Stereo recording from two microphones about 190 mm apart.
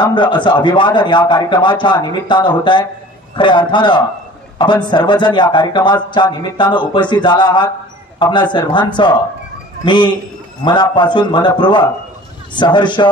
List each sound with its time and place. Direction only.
0.0 s a man's voice: 25° left (ahead or behind)